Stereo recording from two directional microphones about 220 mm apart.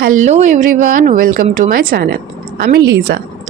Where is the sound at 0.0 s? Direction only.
35° right (ahead or behind).